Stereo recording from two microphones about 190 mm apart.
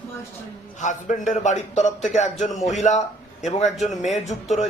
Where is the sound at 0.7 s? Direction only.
40° left (ahead or behind).